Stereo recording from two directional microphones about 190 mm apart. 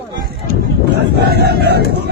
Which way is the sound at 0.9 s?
60° right (ahead or behind).